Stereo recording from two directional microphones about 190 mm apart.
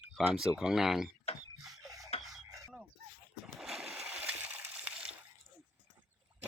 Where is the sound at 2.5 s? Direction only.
15° right (ahead or behind).